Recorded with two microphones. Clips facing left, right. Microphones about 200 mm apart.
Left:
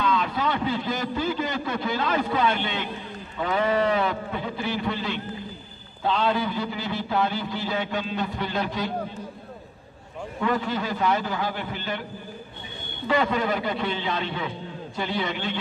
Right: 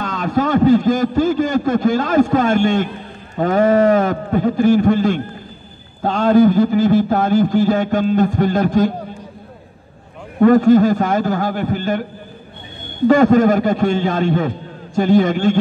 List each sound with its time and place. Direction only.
0.0 s a man's voice: 45° right (ahead or behind)
10.4 s a man's voice: 45° right (ahead or behind)